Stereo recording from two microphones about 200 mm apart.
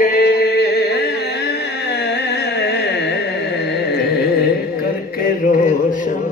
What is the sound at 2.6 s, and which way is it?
Carnatic music, 55° left (ahead or behind).